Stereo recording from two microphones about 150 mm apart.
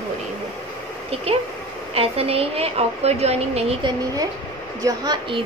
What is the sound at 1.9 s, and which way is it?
Speech, 40° right (ahead or behind).